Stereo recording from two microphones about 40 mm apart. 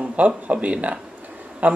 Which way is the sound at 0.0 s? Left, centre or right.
Right.